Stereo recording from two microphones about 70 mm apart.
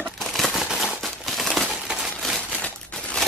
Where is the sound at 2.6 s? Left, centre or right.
Centre.